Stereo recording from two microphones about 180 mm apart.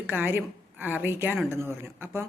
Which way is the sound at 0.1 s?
10° right (ahead or behind).